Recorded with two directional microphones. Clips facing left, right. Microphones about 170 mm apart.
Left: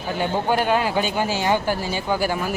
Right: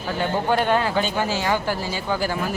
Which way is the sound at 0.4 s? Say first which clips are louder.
Even; 10° left (ahead or behind).